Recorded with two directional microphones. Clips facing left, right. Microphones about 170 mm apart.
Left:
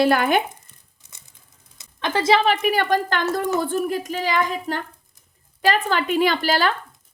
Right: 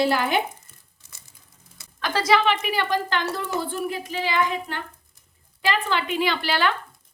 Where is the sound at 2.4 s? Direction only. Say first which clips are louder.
Left 4 dB; 45° left (ahead or behind).